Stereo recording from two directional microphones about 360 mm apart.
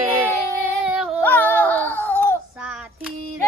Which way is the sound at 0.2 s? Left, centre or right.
Centre.